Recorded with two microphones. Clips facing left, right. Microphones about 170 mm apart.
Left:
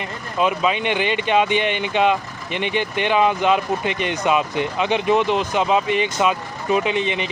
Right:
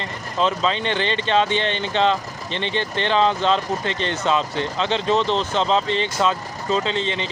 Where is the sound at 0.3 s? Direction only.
10° left (ahead or behind).